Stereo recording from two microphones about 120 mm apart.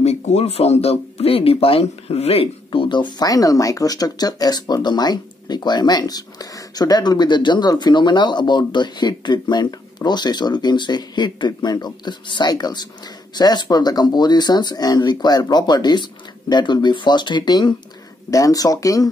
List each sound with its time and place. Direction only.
0.0 s speech: 65° left (ahead or behind); by 19.0 s 30° left (ahead or behind)